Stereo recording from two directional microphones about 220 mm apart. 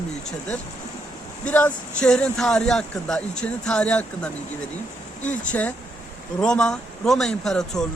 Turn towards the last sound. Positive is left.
turn(degrees=5)  # may be behind; listen again after turning